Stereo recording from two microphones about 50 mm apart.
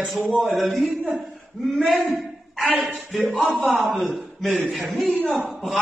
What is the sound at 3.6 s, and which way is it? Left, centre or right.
A man's voice, centre.